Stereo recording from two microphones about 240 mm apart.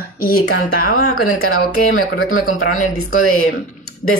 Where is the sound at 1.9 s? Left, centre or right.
Left.